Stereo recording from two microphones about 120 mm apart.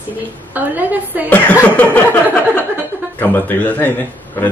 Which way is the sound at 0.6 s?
15° right (ahead or behind).